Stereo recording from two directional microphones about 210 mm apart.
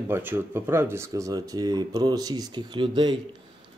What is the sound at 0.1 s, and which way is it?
A man's voice, 10° right (ahead or behind).